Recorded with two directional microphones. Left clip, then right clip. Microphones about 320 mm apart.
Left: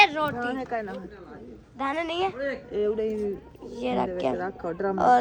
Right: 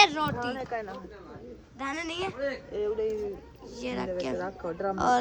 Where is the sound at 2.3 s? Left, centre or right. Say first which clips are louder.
Left 3 dB; left.